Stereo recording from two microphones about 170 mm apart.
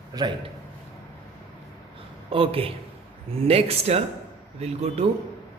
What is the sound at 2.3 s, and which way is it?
Speech, 35° right (ahead or behind).